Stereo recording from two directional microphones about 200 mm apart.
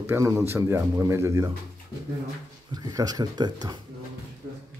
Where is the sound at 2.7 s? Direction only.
20° right (ahead or behind).